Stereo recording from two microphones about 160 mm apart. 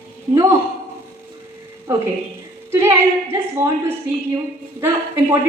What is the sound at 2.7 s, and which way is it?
A woman's voice, 15° right (ahead or behind).